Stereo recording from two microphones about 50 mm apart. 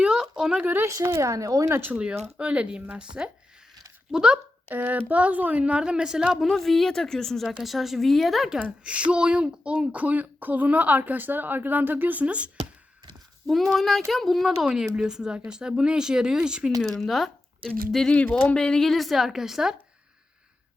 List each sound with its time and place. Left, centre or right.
0.0 s a sound: centre
0.6 s speech: right
0.9 s speech: right
1.9 s speech: right
4.7 s speech: right; by 6.2 s centre
6.4 s a woman's voice: centre
7.4 s speech: centre
8.5 s speech: right
13.5 s speech: centre
14.8 s speech: centre
17.0 s speech: centre
18.1 s a woman's voice: left
18.9 s speech: centre